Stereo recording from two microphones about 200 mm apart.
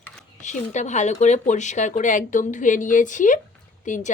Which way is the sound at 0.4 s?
35° left (ahead or behind).